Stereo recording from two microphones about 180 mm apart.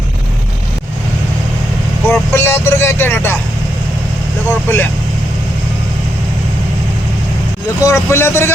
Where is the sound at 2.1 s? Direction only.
15° left (ahead or behind).